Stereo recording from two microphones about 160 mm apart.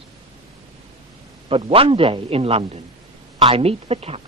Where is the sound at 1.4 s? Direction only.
35° right (ahead or behind).